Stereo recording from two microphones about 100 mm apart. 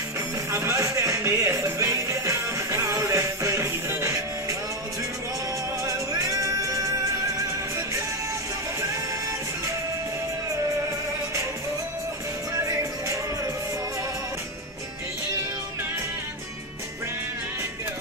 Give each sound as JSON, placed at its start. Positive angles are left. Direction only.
{"t": 0.5, "sound": "music", "side_deg": -25}
{"t": 5.9, "sound": "music", "side_deg": -35}
{"t": 12.5, "sound": "music", "side_deg": -30}